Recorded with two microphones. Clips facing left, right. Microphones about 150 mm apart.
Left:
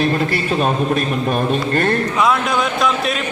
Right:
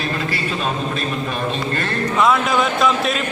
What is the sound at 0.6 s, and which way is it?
Mantra, 50° left (ahead or behind).